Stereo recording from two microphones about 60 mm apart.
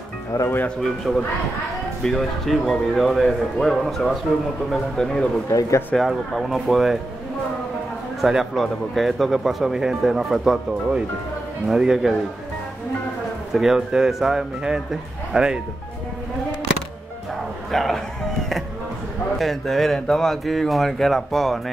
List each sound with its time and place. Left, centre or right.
0.3 s speech: left
0.7 s speech: centre
5.5 s speech: left
6.0 s speech: centre
8.2 s speech: centre
13.5 s a man's voice: centre
17.6 s speech: centre
19.3 s speech: centre